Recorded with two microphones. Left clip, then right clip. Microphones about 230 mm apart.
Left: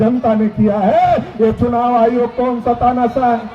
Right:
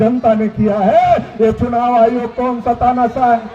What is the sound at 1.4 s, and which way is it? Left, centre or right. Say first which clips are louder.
A man's voice: even; right.